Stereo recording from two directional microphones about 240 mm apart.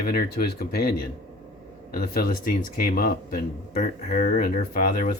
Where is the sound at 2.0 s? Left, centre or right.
Left.